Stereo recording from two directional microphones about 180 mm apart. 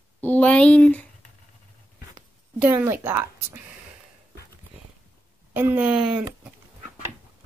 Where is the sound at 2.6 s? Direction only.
10° right (ahead or behind).